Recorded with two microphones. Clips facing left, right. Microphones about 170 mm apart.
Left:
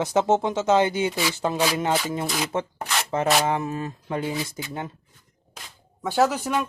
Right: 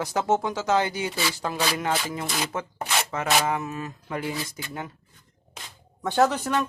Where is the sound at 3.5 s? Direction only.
30° left (ahead or behind).